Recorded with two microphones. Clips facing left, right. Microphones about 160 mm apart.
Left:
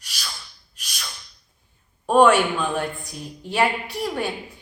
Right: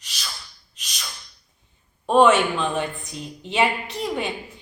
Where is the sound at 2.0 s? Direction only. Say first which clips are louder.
Even; 5° left (ahead or behind).